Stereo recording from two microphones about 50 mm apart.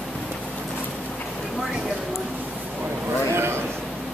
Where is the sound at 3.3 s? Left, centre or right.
Right.